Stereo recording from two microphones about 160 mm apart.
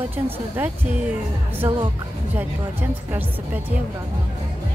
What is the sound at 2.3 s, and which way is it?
A woman's voice, 10° right (ahead or behind).